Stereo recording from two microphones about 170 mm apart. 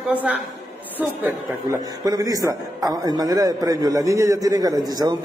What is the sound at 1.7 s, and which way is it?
A man's voice, 20° right (ahead or behind).